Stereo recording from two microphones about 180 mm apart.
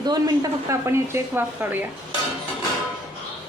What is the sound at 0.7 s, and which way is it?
Speech, 15° right (ahead or behind).